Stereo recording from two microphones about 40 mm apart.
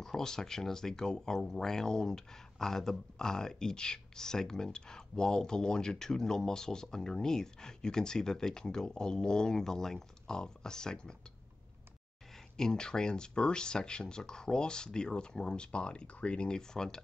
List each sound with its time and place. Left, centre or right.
0.0 s speech: centre
12.5 s speech: centre